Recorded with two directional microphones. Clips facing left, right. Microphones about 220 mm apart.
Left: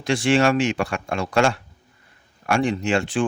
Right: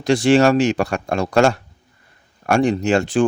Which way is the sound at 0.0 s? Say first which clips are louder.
Right 5 dB; 40° right (ahead or behind).